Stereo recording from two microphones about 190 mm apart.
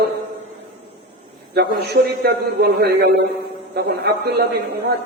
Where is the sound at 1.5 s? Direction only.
55° right (ahead or behind).